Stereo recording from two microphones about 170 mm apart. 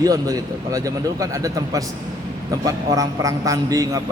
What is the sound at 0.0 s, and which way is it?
A man's voice, 20° right (ahead or behind).